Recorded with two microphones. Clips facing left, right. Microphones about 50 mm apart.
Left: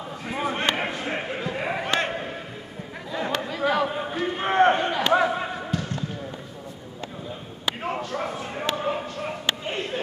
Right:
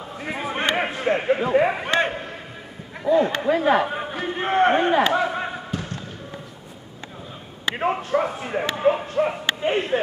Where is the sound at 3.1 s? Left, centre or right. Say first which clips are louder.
Right 10 dB; right.